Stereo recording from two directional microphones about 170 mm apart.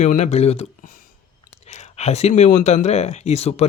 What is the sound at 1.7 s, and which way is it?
Speech, 40° left (ahead or behind).